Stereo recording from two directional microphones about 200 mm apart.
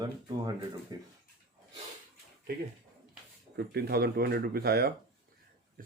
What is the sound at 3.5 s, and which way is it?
Speech, 55° right (ahead or behind).